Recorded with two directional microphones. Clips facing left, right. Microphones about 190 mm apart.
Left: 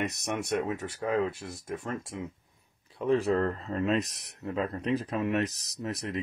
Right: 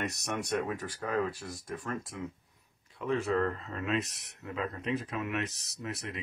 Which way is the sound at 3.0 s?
35° left (ahead or behind).